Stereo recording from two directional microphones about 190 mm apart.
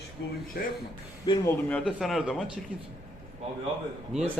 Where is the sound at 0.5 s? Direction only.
50° left (ahead or behind).